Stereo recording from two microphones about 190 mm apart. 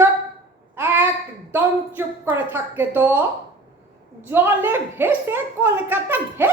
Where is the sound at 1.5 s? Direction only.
10° right (ahead or behind).